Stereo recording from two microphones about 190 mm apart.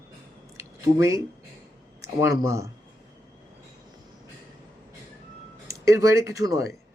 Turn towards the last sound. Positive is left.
turn(degrees=-15)  # may be behind; listen again after turning